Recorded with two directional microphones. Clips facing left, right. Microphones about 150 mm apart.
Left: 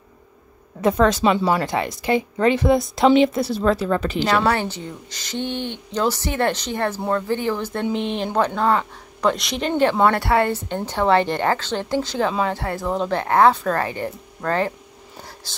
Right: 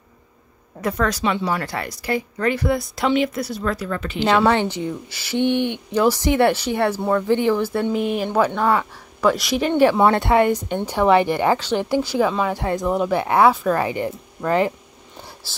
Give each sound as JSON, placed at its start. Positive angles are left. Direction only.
{"t": 0.7, "sound": "speech", "side_deg": 25}
{"t": 4.5, "sound": "a woman's voice", "side_deg": -15}